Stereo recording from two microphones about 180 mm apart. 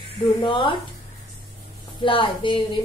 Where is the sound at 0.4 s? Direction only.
25° left (ahead or behind).